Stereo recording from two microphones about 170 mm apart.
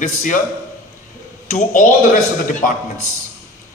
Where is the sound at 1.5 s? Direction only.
50° left (ahead or behind).